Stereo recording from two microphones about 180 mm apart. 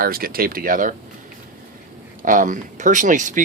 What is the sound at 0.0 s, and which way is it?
Speech, 55° right (ahead or behind).